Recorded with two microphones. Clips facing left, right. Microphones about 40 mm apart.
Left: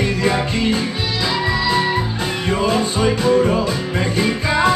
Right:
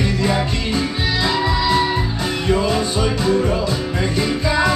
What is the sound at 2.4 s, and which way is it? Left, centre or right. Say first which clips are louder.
Music: even; left.